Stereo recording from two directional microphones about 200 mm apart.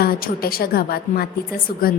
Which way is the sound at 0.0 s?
50° left (ahead or behind).